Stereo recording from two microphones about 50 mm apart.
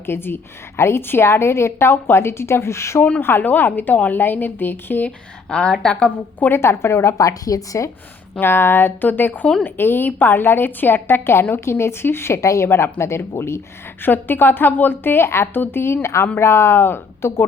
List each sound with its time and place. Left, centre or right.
0.0 s a woman's voice: left
3.2 s a woman's voice: left
3.4 s a woman's voice: left
5.5 s a woman's voice: centre
6.5 s a woman's voice: left
7.7 s a woman's voice: left
8.4 s a woman's voice: left
12.6 s a woman's voice: left
14.0 s a woman's voice: left